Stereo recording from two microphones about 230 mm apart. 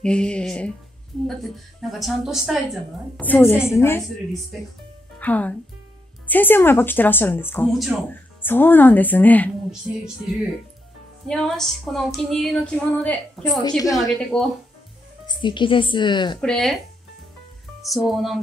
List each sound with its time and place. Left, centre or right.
0.0 s a woman's voice: centre
1.8 s a woman's voice: centre
5.2 s a woman's voice: centre
11.2 s a woman's voice: centre
13.6 s a woman's voice: centre
13.9 s a woman's voice: centre
15.2 s a woman's voice: centre
16.3 s a woman's voice: centre
17.8 s a woman's voice: centre